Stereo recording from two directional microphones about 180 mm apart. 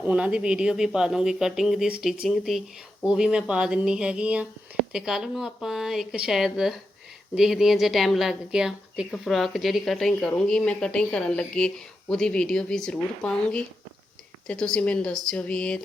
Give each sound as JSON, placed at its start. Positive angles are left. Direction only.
{"t": 0.0, "sound": "a woman's voice", "side_deg": -5}